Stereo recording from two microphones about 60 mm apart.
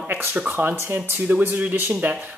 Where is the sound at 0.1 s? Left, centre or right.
Right.